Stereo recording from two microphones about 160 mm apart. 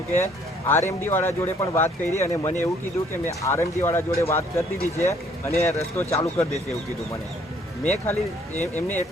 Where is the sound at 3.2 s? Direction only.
15° left (ahead or behind).